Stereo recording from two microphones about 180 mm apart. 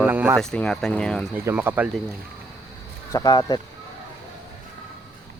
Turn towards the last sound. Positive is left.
turn(degrees=25)  # may be behind; listen again after turning